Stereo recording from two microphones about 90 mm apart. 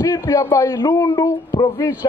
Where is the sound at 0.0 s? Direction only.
35° left (ahead or behind).